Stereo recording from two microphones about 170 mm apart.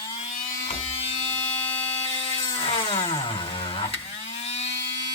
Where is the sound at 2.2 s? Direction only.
30° left (ahead or behind).